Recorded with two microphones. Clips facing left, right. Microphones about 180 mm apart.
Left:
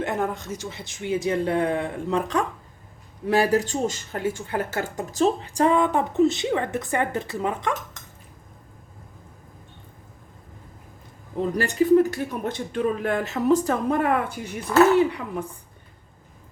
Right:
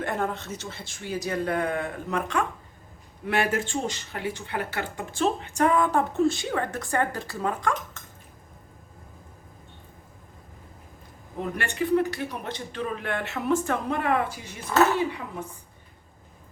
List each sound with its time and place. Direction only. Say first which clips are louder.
0.0 s speech: left 2 dB; 20° left (ahead or behind)
11.3 s a man's voice: left 7 dB; 35° left (ahead or behind)